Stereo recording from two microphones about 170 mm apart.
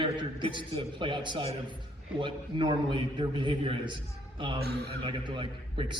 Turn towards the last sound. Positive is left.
turn(degrees=-30)  # may be behind; listen again after turning